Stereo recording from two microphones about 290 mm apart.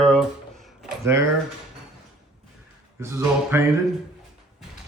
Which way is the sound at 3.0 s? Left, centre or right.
Centre.